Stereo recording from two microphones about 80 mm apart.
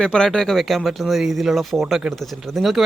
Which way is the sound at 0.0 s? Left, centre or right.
Centre.